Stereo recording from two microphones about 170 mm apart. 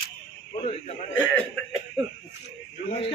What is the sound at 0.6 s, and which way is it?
Radio, 35° left (ahead or behind).